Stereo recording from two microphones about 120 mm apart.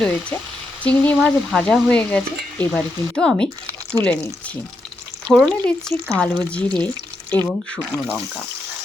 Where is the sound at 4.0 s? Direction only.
30° right (ahead or behind).